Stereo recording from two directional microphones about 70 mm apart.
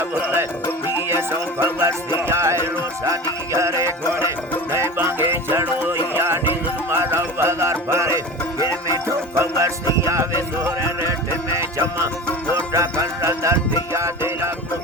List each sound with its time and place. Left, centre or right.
0.0 s music: right
11.8 s music: right